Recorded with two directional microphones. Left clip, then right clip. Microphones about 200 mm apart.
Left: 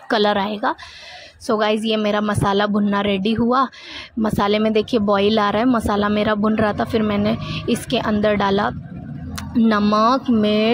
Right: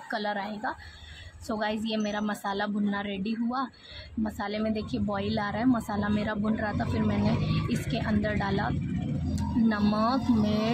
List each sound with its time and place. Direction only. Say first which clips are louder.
0.1 s a woman's voice: left 14 dB; 45° left (ahead or behind)